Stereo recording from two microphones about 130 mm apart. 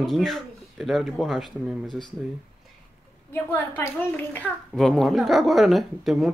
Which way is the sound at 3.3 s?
15° left (ahead or behind).